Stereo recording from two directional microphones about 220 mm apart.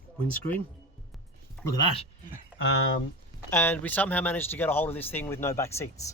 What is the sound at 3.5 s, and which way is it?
Speech, 10° left (ahead or behind).